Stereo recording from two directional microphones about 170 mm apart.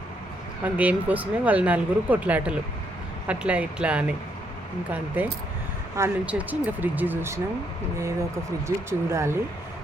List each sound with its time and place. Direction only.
0.6 s speech: 10° right (ahead or behind)
8.6 s speech: 15° right (ahead or behind)